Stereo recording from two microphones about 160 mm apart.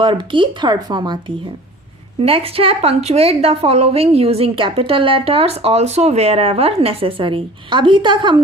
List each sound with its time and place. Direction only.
0.0 s speech: 30° right (ahead or behind)
2.2 s a woman's voice: 35° right (ahead or behind)